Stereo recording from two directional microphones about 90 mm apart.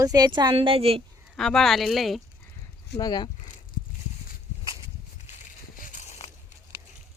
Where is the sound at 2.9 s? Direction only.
50° left (ahead or behind).